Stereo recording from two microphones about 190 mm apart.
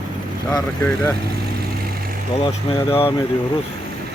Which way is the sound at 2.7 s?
25° left (ahead or behind).